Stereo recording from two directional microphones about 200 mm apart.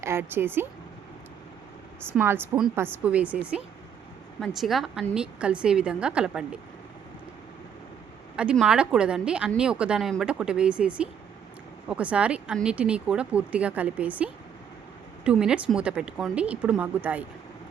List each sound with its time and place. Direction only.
0.0 s speech: 10° right (ahead or behind)
2.1 s speech: 10° right (ahead or behind)
4.4 s a woman's voice: centre (ahead or behind)
8.4 s a woman's voice: 5° right (ahead or behind)